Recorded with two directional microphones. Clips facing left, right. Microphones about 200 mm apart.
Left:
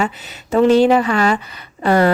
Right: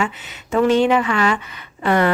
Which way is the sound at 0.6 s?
35° left (ahead or behind).